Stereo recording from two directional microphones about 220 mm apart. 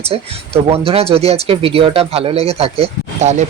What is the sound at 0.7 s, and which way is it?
Speech, 25° right (ahead or behind).